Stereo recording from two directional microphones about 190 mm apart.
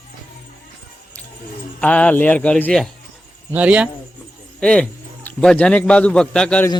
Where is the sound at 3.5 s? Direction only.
5° right (ahead or behind).